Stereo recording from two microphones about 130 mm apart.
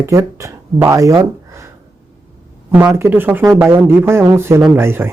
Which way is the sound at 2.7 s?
15° right (ahead or behind).